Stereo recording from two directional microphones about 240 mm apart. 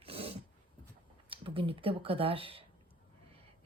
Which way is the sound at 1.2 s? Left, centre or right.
Right.